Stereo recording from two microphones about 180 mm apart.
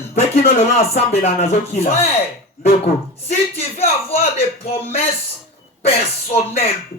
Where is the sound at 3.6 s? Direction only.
35° left (ahead or behind).